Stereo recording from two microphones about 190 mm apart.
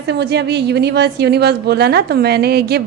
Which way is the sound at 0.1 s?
60° right (ahead or behind).